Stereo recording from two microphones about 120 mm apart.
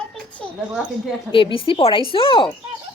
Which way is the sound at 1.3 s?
45° left (ahead or behind).